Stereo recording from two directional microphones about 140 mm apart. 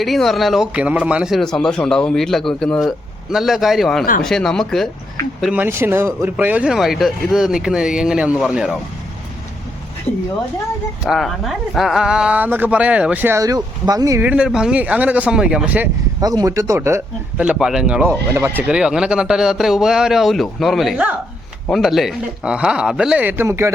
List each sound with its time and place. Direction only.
0.0 s speech: centre (ahead or behind)
5.6 s speech: 15° right (ahead or behind)
11.0 s speech: centre (ahead or behind); by 14.2 s 25° right (ahead or behind)
14.2 s speech: 10° right (ahead or behind)
16.2 s speech: 25° right (ahead or behind)
17.3 s speech: 10° right (ahead or behind)